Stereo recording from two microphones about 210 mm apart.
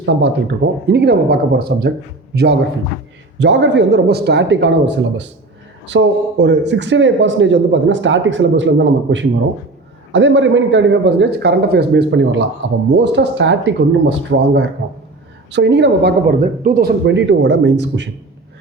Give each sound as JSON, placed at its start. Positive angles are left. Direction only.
{"t": 0.0, "sound": "speech", "side_deg": -55}
{"t": 17.1, "sound": "speech", "side_deg": -60}